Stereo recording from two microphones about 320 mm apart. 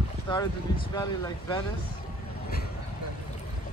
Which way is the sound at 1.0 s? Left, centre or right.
Centre.